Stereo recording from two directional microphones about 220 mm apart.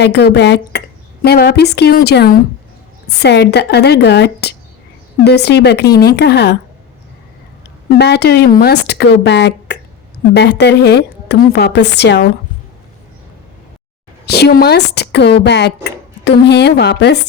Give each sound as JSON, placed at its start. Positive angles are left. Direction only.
{"t": 0.0, "sound": "speech", "side_deg": 50}
{"t": 7.9, "sound": "speech", "side_deg": 50}
{"t": 14.3, "sound": "speech", "side_deg": 45}